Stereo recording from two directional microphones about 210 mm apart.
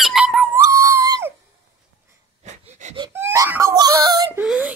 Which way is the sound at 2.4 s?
35° right (ahead or behind).